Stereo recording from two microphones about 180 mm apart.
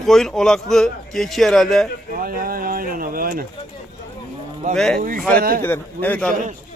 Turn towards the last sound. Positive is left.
turn(degrees=10)  # may be behind; listen again after turning